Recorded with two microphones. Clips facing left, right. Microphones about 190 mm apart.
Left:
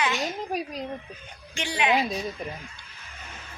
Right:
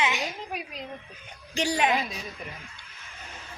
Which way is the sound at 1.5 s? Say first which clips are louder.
Right 3 dB; 45° right (ahead or behind).